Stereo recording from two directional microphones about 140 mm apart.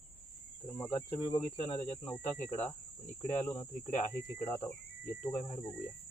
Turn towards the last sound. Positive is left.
turn(degrees=55)  # may be behind; listen again after turning